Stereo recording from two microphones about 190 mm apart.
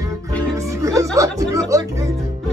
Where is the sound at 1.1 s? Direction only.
15° right (ahead or behind).